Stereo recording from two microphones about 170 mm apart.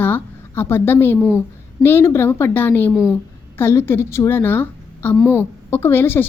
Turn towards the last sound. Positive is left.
turn(degrees=10)  # may be behind; listen again after turning